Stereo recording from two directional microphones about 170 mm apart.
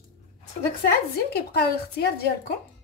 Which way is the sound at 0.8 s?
70° left (ahead or behind).